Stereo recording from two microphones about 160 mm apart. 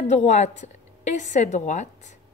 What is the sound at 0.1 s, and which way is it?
A woman's voice, 45° left (ahead or behind).